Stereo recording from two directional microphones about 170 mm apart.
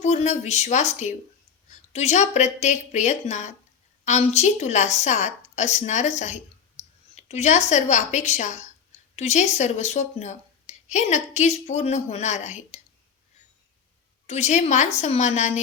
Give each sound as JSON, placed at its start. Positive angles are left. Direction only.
{"t": 0.0, "sound": "speech", "side_deg": 40}
{"t": 6.8, "sound": "clicking", "side_deg": 40}
{"t": 7.2, "sound": "speech", "side_deg": 40}
{"t": 14.3, "sound": "speech", "side_deg": 40}